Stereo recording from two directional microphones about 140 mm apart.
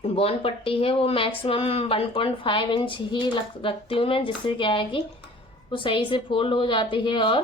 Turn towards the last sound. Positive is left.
turn(degrees=35)  # may be behind; listen again after turning